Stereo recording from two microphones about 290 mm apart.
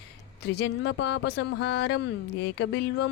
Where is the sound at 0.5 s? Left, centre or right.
Left.